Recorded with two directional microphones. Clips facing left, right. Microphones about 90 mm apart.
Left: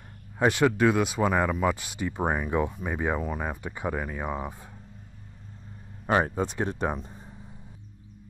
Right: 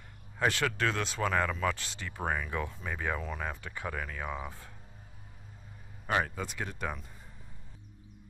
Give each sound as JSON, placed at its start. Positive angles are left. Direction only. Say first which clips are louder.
{"t": 0.4, "sound": "speech", "louder": "left 8 dB", "side_deg": 20}
{"t": 6.0, "sound": "speech", "louder": "left 7 dB", "side_deg": 30}